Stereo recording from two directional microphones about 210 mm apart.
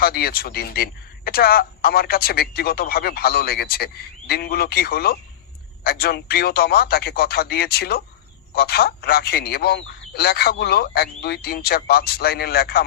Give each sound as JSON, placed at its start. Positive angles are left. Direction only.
{"t": 0.0, "sound": "speech", "side_deg": 45}